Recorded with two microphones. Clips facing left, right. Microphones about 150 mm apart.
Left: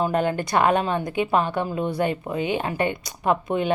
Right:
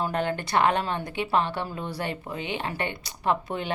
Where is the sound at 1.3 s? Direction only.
15° left (ahead or behind).